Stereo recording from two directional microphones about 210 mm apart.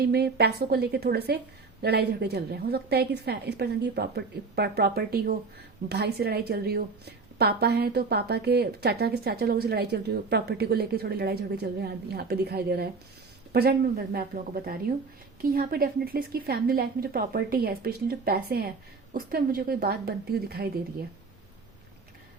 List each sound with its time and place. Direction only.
0.0 s a woman's voice: 50° right (ahead or behind)